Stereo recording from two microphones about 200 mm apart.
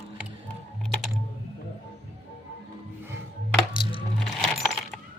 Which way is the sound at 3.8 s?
25° left (ahead or behind).